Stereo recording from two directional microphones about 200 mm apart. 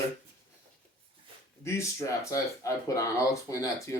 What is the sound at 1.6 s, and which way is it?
Speech, 15° left (ahead or behind).